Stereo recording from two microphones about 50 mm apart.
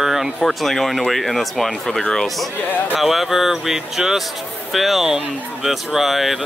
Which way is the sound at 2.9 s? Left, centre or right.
Centre.